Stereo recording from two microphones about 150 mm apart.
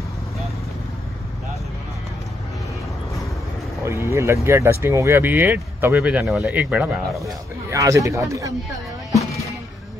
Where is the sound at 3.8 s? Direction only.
20° right (ahead or behind).